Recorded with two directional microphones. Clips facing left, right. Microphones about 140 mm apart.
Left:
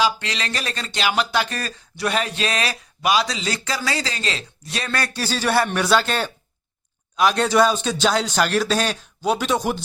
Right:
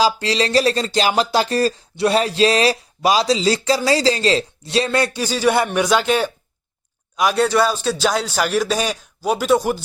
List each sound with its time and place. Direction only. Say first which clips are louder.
0.0 s speech: right 5 dB; 35° right (ahead or behind); by 9.8 s 10° right (ahead or behind)